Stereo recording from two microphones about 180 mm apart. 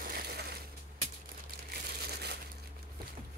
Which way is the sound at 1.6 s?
65° right (ahead or behind).